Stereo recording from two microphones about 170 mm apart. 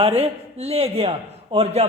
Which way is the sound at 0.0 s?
35° right (ahead or behind).